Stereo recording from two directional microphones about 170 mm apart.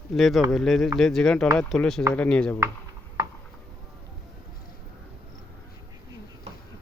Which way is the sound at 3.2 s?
25° right (ahead or behind).